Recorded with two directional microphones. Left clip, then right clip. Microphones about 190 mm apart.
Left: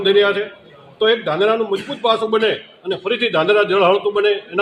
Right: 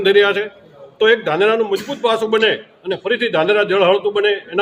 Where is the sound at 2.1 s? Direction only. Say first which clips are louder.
Right 3 dB; 15° right (ahead or behind).